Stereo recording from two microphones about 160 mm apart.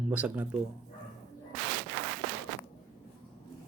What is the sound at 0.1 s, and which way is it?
Speech, 10° right (ahead or behind).